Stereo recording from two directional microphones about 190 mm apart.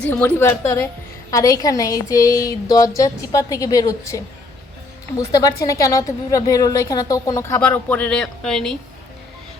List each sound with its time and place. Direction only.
0.0 s a woman's voice: 10° left (ahead or behind)